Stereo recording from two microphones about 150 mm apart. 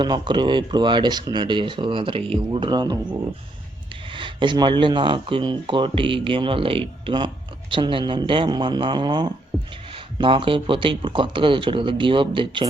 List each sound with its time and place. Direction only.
0.0 s speech: 30° right (ahead or behind)